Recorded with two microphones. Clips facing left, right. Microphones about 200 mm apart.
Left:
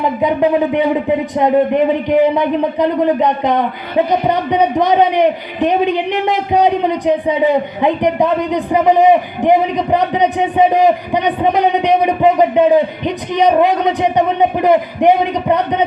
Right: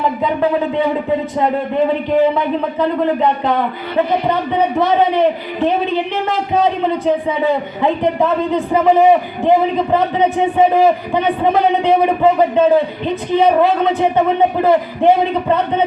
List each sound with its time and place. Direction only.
0.2 s a man's voice: 15° left (ahead or behind)